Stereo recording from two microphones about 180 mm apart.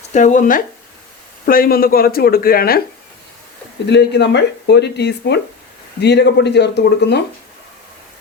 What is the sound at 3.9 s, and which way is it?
Speech, 70° left (ahead or behind).